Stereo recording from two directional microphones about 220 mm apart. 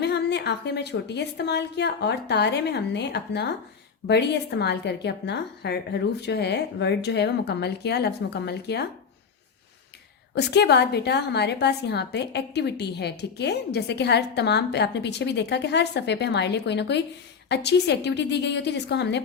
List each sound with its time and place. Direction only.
0.0 s a woman's voice: 50° left (ahead or behind)
10.3 s a woman's voice: 50° left (ahead or behind)